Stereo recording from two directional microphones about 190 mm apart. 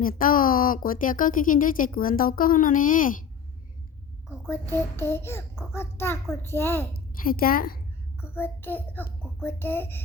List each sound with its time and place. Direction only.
0.0 s a woman's voice: 50° left (ahead or behind)
4.4 s a child's voice: 10° left (ahead or behind)
7.2 s a woman's voice: 50° left (ahead or behind)
8.2 s a child's voice: 10° left (ahead or behind)